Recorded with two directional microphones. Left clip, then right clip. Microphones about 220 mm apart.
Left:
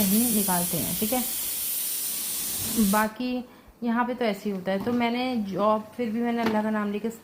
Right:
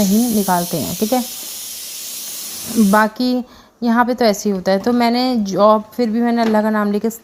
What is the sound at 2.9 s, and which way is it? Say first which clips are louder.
Speech: right 12 dB; 45° right (ahead or behind).